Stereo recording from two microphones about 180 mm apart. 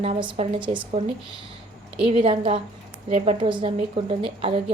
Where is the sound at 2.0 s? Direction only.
30° right (ahead or behind).